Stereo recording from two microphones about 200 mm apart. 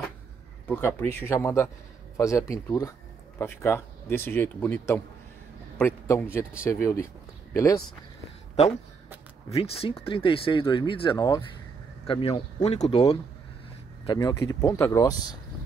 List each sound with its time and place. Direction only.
0.7 s speech: 10° left (ahead or behind)
9.5 s speech: 30° left (ahead or behind)
14.0 s speech: 20° left (ahead or behind)